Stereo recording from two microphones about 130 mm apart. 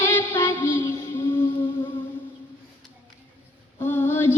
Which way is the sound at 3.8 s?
15° left (ahead or behind).